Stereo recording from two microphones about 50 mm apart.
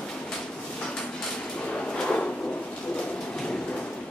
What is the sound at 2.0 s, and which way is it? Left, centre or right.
Drawer open or close, centre.